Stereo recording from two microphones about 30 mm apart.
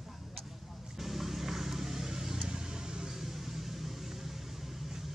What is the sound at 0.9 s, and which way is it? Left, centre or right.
Vehicle, centre.